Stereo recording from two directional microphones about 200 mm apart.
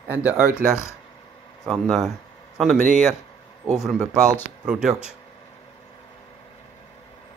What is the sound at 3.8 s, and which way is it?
Speech, centre (ahead or behind).